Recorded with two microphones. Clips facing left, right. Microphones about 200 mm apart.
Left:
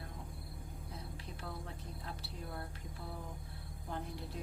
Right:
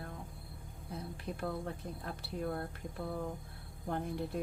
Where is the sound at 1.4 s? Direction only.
55° right (ahead or behind).